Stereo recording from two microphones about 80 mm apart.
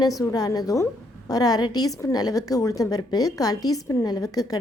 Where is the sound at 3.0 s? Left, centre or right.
Left.